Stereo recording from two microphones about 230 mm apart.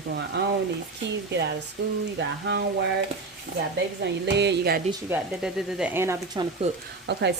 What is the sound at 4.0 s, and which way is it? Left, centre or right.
Speech, right.